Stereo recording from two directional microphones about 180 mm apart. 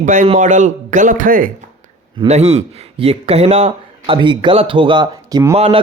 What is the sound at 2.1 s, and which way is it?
A man's voice, 35° right (ahead or behind).